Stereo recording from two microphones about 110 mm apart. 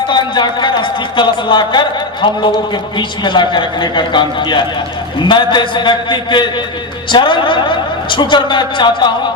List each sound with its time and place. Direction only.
0.1 s speech: 45° left (ahead or behind)